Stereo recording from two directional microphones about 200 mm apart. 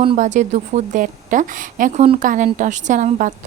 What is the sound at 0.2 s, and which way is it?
A woman's voice, 35° right (ahead or behind).